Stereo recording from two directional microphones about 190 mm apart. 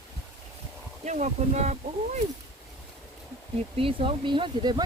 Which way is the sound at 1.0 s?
40° right (ahead or behind).